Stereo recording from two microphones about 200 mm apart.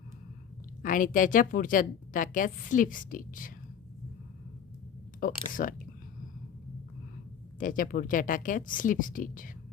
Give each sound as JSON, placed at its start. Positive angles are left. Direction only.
{"t": 0.8, "sound": "a woman's voice", "side_deg": 45}
{"t": 5.2, "sound": "a woman's voice", "side_deg": 45}
{"t": 7.6, "sound": "a woman's voice", "side_deg": 40}